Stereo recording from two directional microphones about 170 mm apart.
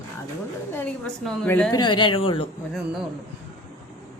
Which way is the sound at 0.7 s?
10° left (ahead or behind).